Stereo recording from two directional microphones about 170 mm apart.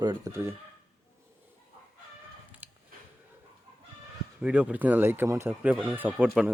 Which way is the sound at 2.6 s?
10° right (ahead or behind).